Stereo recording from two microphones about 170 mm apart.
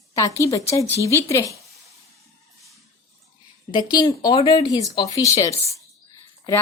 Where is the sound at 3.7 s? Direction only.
25° left (ahead or behind).